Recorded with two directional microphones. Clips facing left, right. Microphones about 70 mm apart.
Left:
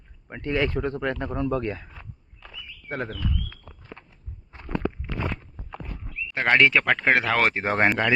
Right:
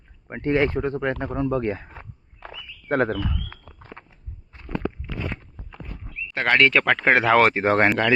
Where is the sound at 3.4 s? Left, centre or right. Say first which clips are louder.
Right 1 dB; right.